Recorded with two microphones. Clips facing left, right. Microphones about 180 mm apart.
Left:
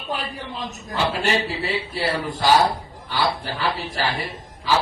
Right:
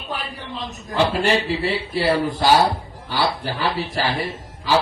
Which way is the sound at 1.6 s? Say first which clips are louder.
Right 4 dB; 40° right (ahead or behind).